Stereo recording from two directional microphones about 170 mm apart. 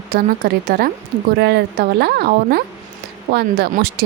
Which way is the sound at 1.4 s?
75° right (ahead or behind).